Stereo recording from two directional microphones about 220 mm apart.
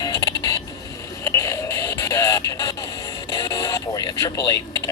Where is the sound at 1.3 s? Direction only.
10° left (ahead or behind).